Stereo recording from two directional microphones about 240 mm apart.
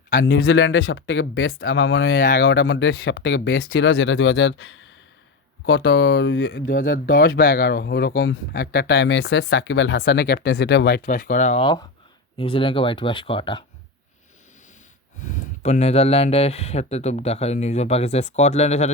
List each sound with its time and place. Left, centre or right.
0.3 s speech: left
6.7 s speech: left
15.2 s speech: left